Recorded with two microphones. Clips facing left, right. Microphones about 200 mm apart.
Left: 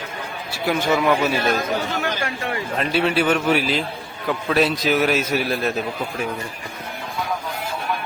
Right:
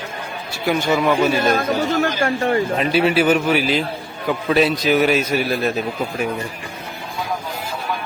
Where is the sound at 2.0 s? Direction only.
50° right (ahead or behind).